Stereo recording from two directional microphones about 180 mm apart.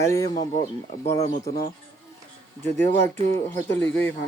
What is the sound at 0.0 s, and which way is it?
Speech, 20° left (ahead or behind).